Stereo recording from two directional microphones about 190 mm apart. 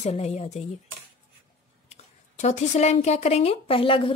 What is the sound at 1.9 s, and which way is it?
A woman's voice, 40° left (ahead or behind).